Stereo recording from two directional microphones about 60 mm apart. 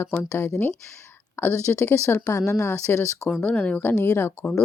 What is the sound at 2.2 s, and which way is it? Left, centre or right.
Speech, left.